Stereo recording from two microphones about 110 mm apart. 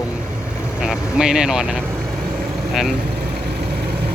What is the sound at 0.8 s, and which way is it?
Speech, 5° right (ahead or behind).